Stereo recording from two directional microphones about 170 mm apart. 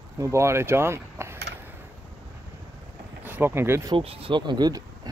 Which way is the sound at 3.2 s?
10° right (ahead or behind).